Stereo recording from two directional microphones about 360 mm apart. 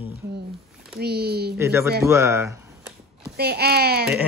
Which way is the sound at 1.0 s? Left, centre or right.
Right.